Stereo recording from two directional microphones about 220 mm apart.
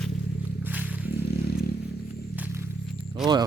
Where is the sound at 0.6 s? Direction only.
5° right (ahead or behind).